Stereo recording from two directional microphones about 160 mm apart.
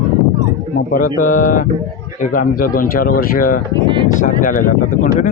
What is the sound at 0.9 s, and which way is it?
A man's voice, 60° left (ahead or behind).